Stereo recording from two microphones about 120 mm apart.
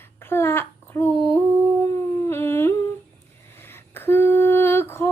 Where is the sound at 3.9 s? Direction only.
20° left (ahead or behind).